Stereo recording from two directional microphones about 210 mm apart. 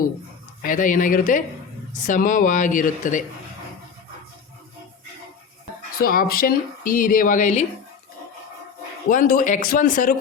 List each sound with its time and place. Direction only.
0.6 s speech: 40° left (ahead or behind)
6.0 s speech: 45° left (ahead or behind)
9.0 s speech: 40° left (ahead or behind)